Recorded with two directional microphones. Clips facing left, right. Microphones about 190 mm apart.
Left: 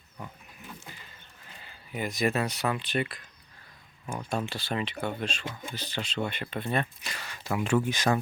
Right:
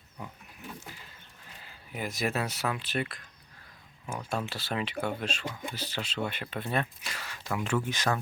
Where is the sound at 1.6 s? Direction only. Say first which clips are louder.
Left 3 dB; 5° right (ahead or behind).